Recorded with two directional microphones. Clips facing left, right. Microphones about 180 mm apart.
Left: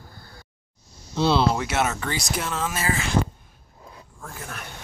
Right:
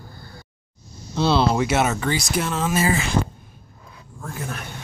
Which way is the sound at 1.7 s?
10° right (ahead or behind).